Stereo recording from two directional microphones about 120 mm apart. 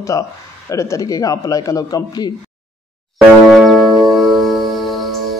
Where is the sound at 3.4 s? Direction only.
Centre (ahead or behind).